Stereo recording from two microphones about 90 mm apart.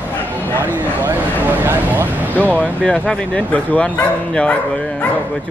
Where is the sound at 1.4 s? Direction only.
25° right (ahead or behind).